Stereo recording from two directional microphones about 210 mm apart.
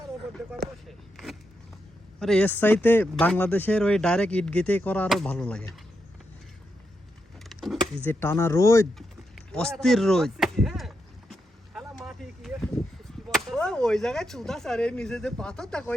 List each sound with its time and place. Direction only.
0.6 s a sound: centre (ahead or behind)
2.1 s speech: 5° left (ahead or behind)
7.5 s vehicle: centre (ahead or behind)
8.0 s speech: 10° left (ahead or behind)
9.5 s a sound: 5° left (ahead or behind)
13.3 s speech: centre (ahead or behind)